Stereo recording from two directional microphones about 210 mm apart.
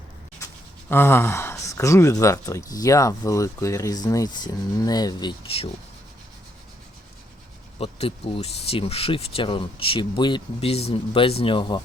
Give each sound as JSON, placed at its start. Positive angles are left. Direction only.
{"t": 0.9, "sound": "speech", "side_deg": 10}
{"t": 7.8, "sound": "speech", "side_deg": 25}